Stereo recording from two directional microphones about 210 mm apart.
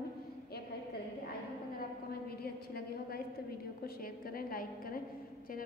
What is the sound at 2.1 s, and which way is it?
A woman's voice, 45° left (ahead or behind).